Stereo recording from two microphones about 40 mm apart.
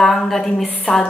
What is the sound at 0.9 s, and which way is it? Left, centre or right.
Speech, centre.